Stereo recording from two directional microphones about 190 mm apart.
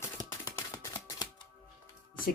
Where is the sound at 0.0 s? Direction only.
15° left (ahead or behind).